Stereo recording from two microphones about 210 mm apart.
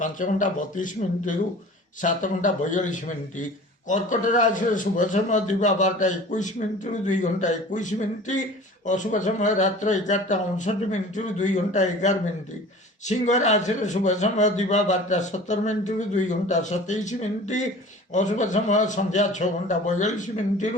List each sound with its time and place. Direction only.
0.0 s a man's voice: 40° left (ahead or behind)